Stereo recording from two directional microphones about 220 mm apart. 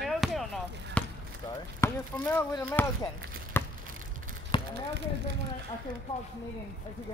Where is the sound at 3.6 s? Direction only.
10° left (ahead or behind).